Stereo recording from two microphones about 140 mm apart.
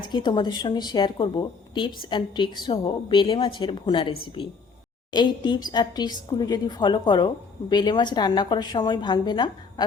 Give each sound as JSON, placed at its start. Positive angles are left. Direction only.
{"t": 0.0, "sound": "a woman's voice", "side_deg": 35}